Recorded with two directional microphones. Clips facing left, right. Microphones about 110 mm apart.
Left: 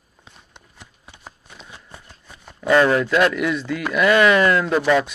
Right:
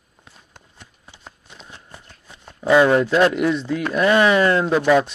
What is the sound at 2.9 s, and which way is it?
Speech, 30° right (ahead or behind).